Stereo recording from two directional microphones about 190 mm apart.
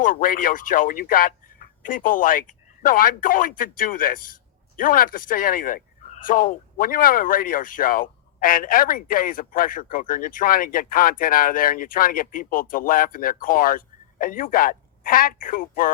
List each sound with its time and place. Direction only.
0.0 s speech: 45° left (ahead or behind)